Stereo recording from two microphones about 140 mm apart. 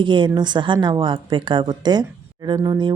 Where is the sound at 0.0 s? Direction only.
35° right (ahead or behind).